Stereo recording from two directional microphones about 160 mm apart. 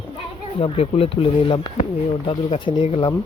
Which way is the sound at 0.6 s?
40° left (ahead or behind).